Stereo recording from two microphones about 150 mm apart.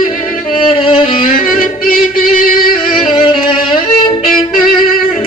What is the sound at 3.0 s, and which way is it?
Music, 35° left (ahead or behind).